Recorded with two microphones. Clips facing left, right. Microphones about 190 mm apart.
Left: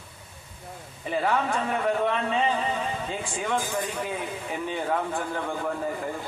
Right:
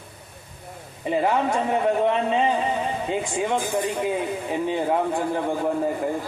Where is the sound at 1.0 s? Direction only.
20° right (ahead or behind).